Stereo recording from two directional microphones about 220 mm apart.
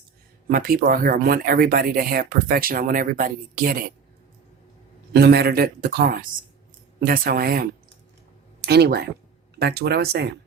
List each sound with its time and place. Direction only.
0.4 s speech: 40° right (ahead or behind)
5.1 s speech: 45° right (ahead or behind)